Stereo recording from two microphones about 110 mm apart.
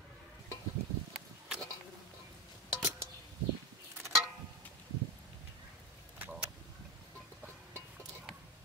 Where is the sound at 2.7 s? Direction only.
15° right (ahead or behind).